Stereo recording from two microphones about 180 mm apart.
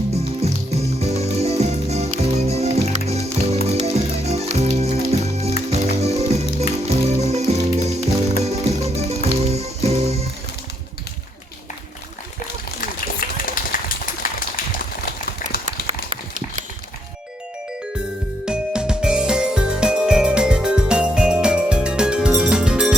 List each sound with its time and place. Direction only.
0.1 s music: 35° right (ahead or behind)
12.8 s a sound: 50° left (ahead or behind)
15.9 s clip-clop: 45° right (ahead or behind)
18.4 s music: 5° right (ahead or behind)